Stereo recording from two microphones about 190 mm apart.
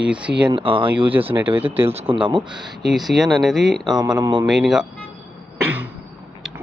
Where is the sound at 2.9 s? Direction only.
Centre (ahead or behind).